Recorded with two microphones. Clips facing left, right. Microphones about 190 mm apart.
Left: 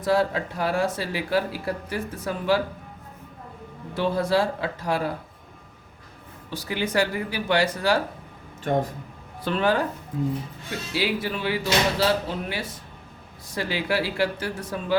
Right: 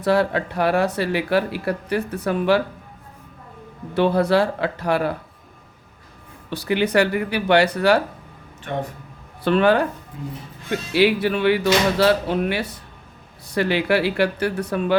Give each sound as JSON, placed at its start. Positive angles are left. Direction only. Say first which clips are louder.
{"t": 0.0, "sound": "speech", "louder": "right 3 dB", "side_deg": -65}
{"t": 3.9, "sound": "speech", "louder": "right 5 dB", "side_deg": -65}
{"t": 6.5, "sound": "speech", "louder": "right 7 dB", "side_deg": -65}
{"t": 8.6, "sound": "speech", "louder": "left 3 dB", "side_deg": 40}
{"t": 9.4, "sound": "speech", "louder": "right 6 dB", "side_deg": -65}